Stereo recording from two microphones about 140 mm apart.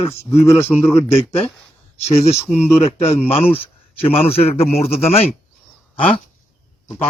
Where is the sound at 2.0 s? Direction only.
50° left (ahead or behind).